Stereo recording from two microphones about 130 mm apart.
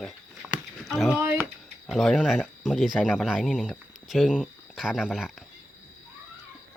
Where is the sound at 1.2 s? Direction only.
20° right (ahead or behind).